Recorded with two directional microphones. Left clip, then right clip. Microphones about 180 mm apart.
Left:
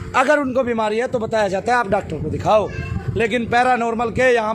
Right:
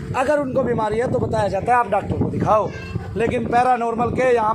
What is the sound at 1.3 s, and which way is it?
Speech, 70° left (ahead or behind).